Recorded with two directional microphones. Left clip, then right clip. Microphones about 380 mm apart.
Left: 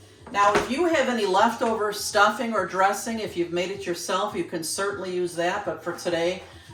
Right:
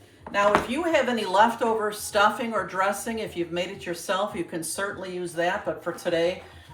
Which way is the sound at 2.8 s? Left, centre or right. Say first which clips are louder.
Left 4 dB; centre.